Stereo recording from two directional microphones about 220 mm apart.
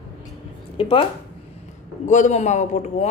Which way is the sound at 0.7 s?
25° left (ahead or behind).